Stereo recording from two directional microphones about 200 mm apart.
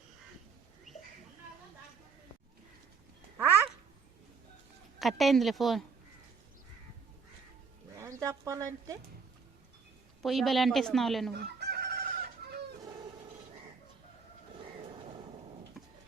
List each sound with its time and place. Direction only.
0.9 s a sound: centre (ahead or behind)
3.3 s quack: 10° right (ahead or behind)
4.9 s speech: centre (ahead or behind)
7.9 s a sound: 15° right (ahead or behind)
10.2 s speech: centre (ahead or behind)
11.3 s chicken: 55° right (ahead or behind)
15.8 s clip-clop: centre (ahead or behind)